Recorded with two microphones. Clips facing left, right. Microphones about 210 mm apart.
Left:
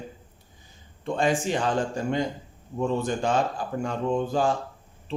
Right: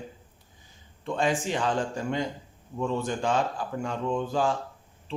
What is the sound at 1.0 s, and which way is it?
Speech, 45° left (ahead or behind).